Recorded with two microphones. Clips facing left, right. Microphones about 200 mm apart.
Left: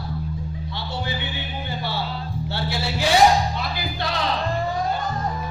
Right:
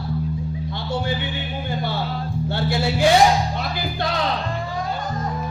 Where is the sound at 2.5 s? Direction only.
50° right (ahead or behind).